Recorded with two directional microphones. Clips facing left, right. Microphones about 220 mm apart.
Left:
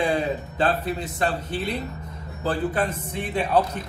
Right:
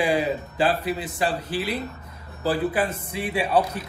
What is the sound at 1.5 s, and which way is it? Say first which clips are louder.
Speech: right 1 dB; 25° left (ahead or behind).